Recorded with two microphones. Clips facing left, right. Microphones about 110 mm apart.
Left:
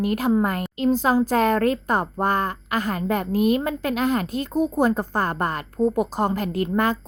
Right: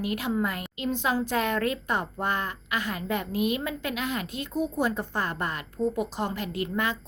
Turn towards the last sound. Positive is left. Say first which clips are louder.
# left 7 dB
turn(degrees=45)  # may be behind; listen again after turning